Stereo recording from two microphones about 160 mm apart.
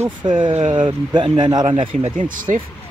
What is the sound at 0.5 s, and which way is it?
Speech, 45° right (ahead or behind).